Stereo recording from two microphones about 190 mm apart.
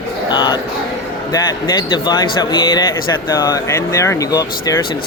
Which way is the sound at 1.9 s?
20° left (ahead or behind).